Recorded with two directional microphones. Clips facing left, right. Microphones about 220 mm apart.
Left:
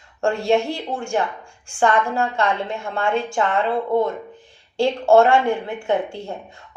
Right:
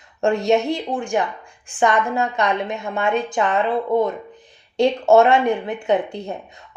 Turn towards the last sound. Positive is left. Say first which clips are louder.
# right 2 dB
turn(degrees=-20)  # may be behind; listen again after turning